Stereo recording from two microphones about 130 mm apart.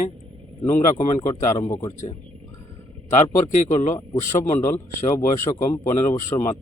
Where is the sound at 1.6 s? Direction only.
25° left (ahead or behind).